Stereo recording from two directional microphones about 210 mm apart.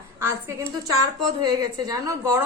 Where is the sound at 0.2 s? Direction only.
15° right (ahead or behind).